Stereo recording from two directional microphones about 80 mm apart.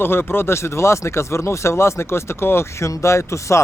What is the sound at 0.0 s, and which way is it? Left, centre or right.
Speech, left.